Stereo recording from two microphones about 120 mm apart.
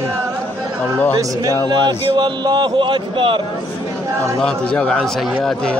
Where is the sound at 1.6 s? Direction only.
35° right (ahead or behind).